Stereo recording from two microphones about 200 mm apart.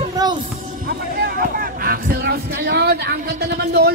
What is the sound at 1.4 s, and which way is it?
Speech, 45° right (ahead or behind).